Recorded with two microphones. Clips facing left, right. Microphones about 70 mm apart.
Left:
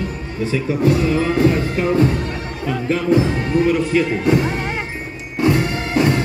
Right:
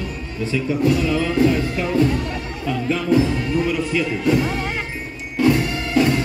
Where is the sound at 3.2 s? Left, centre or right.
Left.